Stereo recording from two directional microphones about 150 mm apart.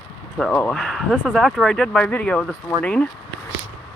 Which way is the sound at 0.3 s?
5° left (ahead or behind).